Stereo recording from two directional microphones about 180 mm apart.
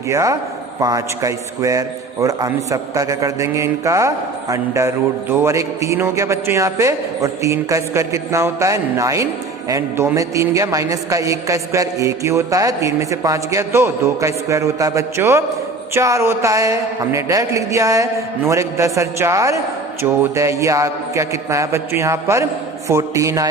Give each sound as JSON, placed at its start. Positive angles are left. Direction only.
{"t": 0.1, "sound": "a man's voice", "side_deg": -15}